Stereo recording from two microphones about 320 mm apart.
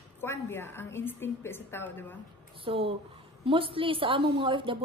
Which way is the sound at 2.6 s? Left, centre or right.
Centre.